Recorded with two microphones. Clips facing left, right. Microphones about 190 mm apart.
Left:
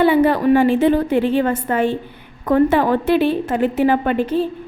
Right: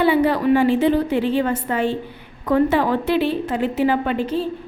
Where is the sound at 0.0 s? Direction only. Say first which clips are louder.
Left 3 dB; 50° left (ahead or behind).